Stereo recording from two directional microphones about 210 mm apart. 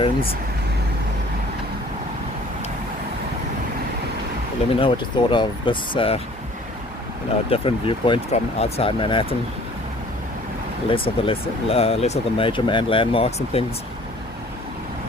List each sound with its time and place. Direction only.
0.0 s speech: 25° left (ahead or behind)
4.7 s speech: 25° left (ahead or behind)
7.5 s speech: 25° left (ahead or behind)
10.8 s speech: 25° left (ahead or behind)